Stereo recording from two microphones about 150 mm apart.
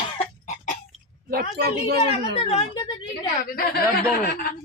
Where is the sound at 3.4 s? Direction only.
80° left.